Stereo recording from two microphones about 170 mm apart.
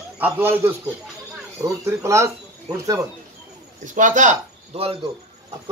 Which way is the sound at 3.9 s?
50° right (ahead or behind).